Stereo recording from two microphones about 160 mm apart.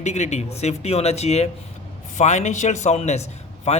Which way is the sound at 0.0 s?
45° left (ahead or behind).